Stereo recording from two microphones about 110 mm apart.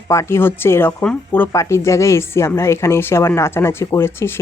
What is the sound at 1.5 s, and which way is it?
Speech, 25° left (ahead or behind).